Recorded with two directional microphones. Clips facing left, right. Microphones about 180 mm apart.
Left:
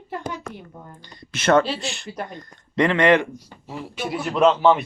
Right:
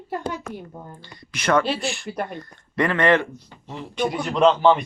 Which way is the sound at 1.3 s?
25° left (ahead or behind).